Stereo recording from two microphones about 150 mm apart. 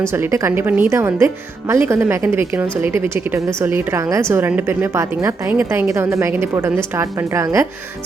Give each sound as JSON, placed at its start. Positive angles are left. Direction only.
{"t": 0.0, "sound": "speech", "side_deg": -15}